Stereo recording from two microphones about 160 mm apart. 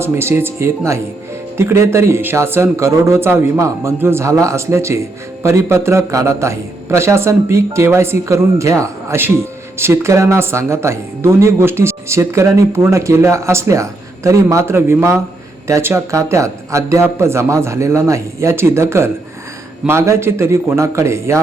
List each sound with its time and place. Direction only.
0.0 s a man's voice: 15° right (ahead or behind)